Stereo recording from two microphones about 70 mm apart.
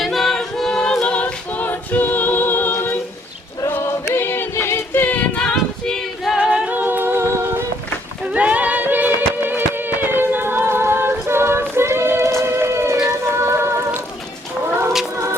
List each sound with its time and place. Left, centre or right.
0.0 s a capella: centre; by 2.7 s left
4.0 s female singing: left; by 6.3 s centre
6.3 s singing: centre; by 7.6 s right
8.2 s music: centre; by 14.0 s right